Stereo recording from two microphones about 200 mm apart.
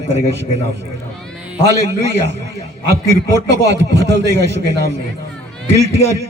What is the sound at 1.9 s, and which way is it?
A man's voice, 55° right (ahead or behind).